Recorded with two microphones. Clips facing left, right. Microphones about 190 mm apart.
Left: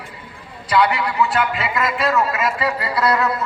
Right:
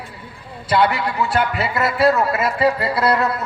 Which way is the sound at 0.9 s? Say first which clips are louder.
Even; 45° right (ahead or behind).